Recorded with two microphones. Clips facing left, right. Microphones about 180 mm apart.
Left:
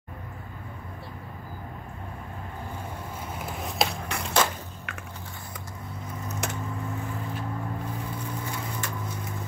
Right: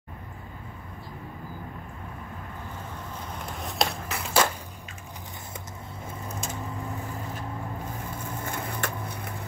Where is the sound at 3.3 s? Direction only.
5° left (ahead or behind).